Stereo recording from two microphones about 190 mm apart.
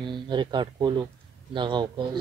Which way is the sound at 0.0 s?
25° right (ahead or behind).